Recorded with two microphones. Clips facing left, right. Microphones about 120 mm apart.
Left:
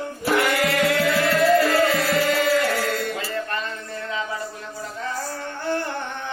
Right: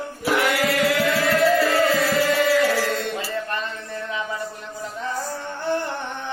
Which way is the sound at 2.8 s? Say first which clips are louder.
Even; 25° right (ahead or behind).